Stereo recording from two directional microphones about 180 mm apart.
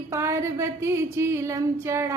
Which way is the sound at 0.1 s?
15° right (ahead or behind).